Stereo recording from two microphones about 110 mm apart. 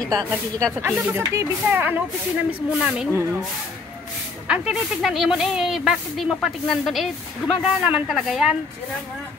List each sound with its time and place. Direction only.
0.1 s speech: 25° right (ahead or behind); by 3.1 s 10° right (ahead or behind)
4.5 s speech: 5° right (ahead or behind)